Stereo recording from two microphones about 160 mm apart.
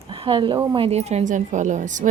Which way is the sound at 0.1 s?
35° right (ahead or behind).